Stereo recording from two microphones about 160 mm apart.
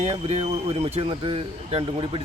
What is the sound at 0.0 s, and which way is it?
Speech, 45° right (ahead or behind).